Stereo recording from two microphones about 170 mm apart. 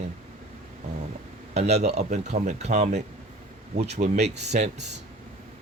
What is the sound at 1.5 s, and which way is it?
Speech, 40° right (ahead or behind).